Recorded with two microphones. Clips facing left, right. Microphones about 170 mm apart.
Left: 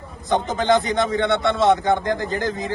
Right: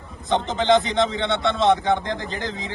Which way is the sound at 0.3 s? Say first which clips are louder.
Even; 20° right (ahead or behind).